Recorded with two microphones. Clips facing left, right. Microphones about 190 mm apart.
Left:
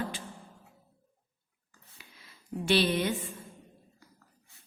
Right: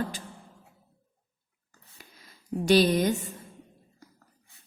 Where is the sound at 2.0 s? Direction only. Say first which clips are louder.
Right 3 dB; 40° right (ahead or behind).